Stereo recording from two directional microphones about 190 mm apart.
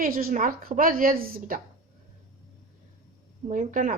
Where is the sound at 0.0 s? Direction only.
45° right (ahead or behind).